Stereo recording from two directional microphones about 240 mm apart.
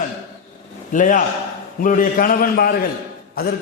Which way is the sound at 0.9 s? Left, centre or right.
Left.